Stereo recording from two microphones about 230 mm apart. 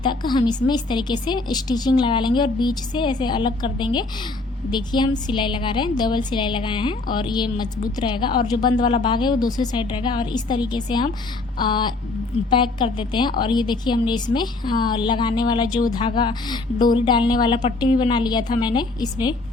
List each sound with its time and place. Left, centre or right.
0.0 s a woman's voice: centre